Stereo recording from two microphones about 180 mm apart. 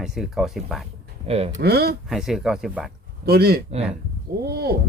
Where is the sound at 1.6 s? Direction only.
60° right (ahead or behind).